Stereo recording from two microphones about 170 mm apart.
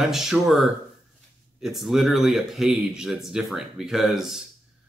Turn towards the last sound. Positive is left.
turn(degrees=0)  # may be behind; listen again after turning